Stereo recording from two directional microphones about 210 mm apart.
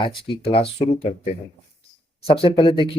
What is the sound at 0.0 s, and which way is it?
Speech, 25° left (ahead or behind).